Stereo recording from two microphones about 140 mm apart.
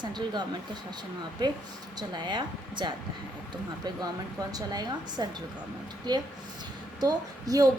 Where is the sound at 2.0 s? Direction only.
30° right (ahead or behind).